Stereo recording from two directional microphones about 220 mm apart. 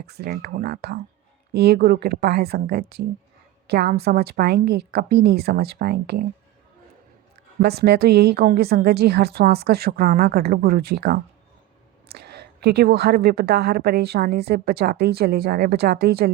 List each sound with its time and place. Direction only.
0.1 s a woman's voice: 45° right (ahead or behind)
7.6 s a woman's voice: 50° right (ahead or behind)